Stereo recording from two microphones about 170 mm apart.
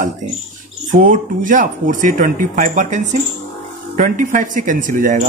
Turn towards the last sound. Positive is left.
turn(degrees=-55)  # may be behind; listen again after turning